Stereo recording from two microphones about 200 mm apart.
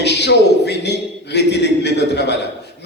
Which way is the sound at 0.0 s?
60° left (ahead or behind).